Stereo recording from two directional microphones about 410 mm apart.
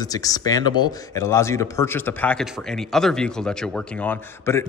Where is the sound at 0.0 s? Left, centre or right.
Centre.